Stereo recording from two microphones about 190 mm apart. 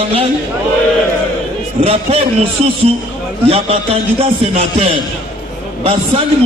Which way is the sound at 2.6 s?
35° right (ahead or behind).